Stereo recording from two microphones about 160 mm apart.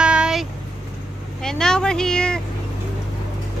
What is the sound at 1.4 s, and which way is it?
Speech, 5° left (ahead or behind).